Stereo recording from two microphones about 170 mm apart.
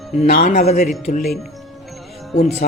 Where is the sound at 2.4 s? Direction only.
40° left (ahead or behind).